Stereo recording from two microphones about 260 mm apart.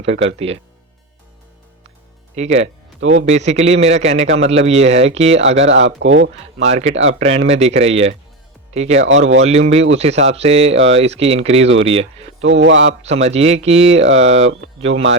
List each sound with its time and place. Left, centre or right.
0.0 s speech: right
2.3 s speech: right
3.0 s speech: right
3.2 s speech: right
6.0 s speech: right
6.6 s speech: right
6.9 s speech: right
7.2 s speech: right
9.0 s speech: right
9.4 s speech: right
12.4 s speech: right
13.0 s speech: right